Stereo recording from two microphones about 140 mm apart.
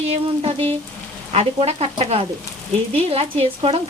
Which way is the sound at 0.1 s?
45° right (ahead or behind).